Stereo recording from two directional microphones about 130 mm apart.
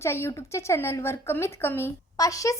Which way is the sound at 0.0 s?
20° left (ahead or behind).